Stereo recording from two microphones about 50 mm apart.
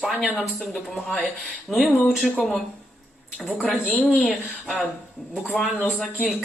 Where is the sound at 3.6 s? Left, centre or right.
Centre.